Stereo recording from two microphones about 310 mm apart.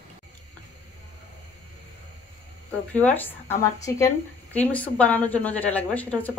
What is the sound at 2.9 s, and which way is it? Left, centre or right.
A woman's voice, centre.